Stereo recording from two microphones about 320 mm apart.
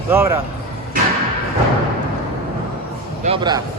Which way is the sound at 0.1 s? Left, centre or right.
Centre.